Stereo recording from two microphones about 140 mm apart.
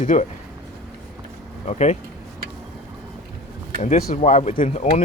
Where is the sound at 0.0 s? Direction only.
60° left (ahead or behind).